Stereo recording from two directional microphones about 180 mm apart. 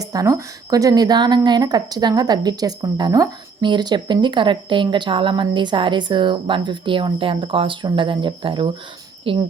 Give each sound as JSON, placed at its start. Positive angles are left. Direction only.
{"t": 0.0, "sound": "a woman's voice", "side_deg": -20}